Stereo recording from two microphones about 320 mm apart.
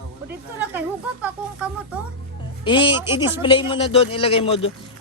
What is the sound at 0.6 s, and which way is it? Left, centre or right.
Speech, centre.